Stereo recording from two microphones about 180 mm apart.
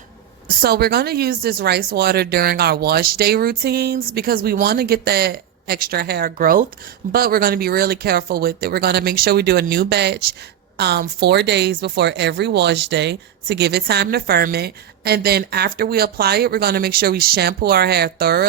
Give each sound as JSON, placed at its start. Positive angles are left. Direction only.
{"t": 0.4, "sound": "speech", "side_deg": -60}